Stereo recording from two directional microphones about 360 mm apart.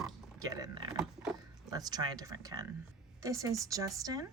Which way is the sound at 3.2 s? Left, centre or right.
Centre.